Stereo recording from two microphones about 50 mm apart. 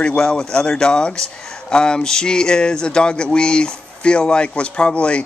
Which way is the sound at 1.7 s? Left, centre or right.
Centre.